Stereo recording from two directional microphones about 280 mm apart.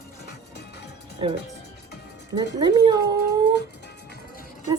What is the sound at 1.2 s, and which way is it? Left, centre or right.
Speech, centre.